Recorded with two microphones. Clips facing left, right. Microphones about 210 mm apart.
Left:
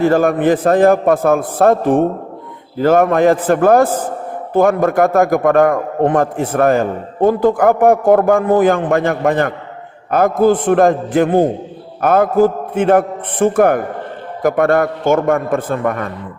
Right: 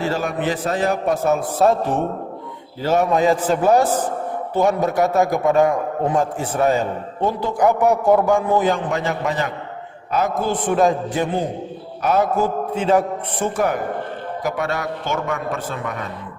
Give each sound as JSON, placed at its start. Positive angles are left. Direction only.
{"t": 0.0, "sound": "a man's voice", "side_deg": 55}